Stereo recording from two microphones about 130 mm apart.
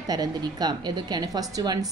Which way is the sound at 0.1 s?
30° right (ahead or behind).